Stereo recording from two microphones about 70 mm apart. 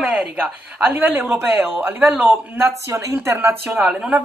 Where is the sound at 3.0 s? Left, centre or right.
Right.